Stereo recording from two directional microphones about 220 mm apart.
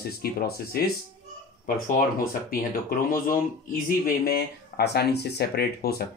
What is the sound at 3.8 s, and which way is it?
Speech, 40° left (ahead or behind).